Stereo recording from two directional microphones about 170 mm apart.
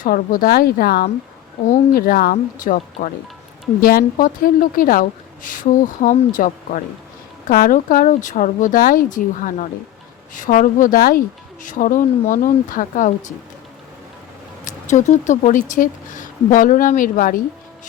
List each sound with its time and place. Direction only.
0.0 s a woman's voice: 55° left (ahead or behind)
1.6 s speech: 45° left (ahead or behind)
2.0 s speech: 60° left (ahead or behind)
3.8 s speech: 60° left (ahead or behind)
14.6 s speech: 45° left (ahead or behind)